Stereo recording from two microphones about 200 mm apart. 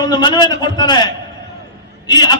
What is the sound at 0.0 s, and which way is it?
A man's voice, 20° left (ahead or behind).